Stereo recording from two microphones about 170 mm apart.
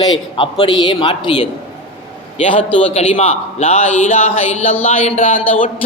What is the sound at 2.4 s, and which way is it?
A man's voice, 30° left (ahead or behind).